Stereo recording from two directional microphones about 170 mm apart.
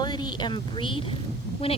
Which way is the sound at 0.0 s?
25° left (ahead or behind).